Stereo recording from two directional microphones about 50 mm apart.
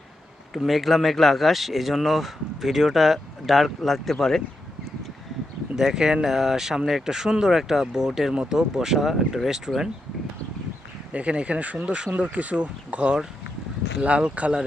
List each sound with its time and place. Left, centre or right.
0.6 s speech: centre
5.7 s speech: centre
11.1 s speech: right